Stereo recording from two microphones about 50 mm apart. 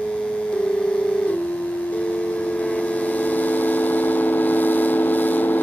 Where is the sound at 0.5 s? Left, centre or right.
Left.